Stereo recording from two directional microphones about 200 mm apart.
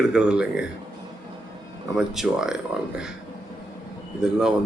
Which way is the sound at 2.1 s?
Centre (ahead or behind).